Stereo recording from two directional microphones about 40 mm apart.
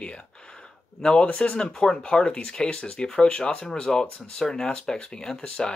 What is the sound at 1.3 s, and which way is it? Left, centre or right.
Speech, left.